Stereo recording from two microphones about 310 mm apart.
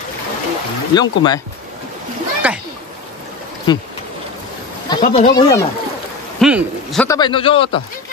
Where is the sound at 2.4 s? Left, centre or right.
Centre.